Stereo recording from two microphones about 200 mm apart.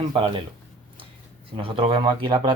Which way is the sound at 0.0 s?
25° right (ahead or behind).